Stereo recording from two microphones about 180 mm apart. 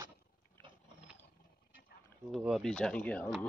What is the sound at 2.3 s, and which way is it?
Speech, centre (ahead or behind).